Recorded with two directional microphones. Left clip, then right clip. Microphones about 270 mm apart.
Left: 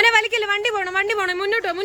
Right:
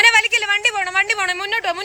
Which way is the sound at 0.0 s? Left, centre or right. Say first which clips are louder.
Right 3 dB; centre.